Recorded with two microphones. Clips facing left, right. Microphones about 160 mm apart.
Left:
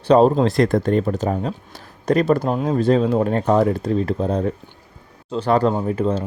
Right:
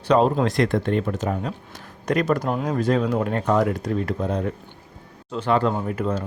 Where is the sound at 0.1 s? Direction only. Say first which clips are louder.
Left 5 dB; 35° left (ahead or behind).